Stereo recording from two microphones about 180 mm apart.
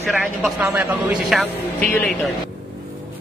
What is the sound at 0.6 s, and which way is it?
Speech, 10° right (ahead or behind).